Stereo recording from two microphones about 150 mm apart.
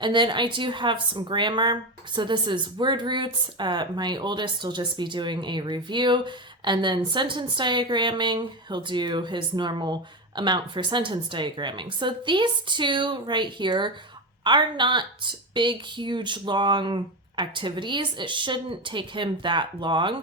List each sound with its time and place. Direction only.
0.0 s a woman's voice: 30° right (ahead or behind)